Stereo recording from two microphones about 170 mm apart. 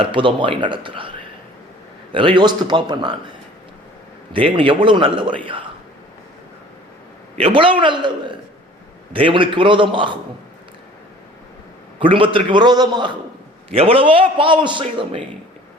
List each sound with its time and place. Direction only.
0.0 s a man's voice: 30° right (ahead or behind)
2.1 s a man's voice: 30° right (ahead or behind)
7.3 s a man's voice: 30° right (ahead or behind)
11.9 s a man's voice: 30° right (ahead or behind)